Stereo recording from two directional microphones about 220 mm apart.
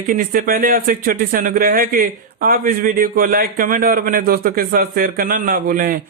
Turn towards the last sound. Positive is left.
turn(degrees=-40)  # may be behind; listen again after turning